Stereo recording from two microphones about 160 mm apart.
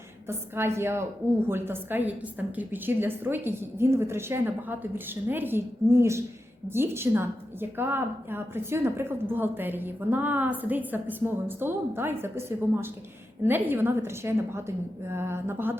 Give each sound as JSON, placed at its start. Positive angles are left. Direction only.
{"t": 0.3, "sound": "a woman's voice", "side_deg": -15}